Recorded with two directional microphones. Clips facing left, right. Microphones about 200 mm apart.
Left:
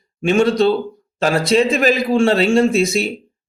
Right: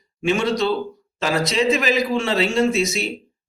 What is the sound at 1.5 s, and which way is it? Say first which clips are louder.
A man's voice: left 5 dB; 55° left (ahead or behind).